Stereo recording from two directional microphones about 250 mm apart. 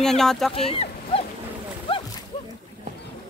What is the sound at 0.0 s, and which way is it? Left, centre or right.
Speech, centre.